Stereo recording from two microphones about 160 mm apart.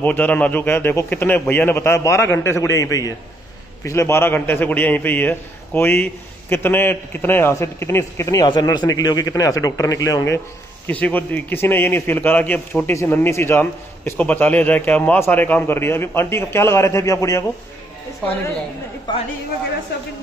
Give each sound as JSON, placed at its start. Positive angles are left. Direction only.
{"t": 0.0, "sound": "a man's voice", "side_deg": 10}